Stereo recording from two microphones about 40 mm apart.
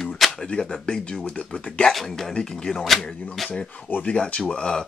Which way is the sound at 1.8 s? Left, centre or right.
Centre.